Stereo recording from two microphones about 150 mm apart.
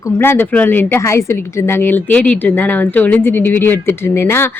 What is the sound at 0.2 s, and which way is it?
A woman's voice, 15° left (ahead or behind).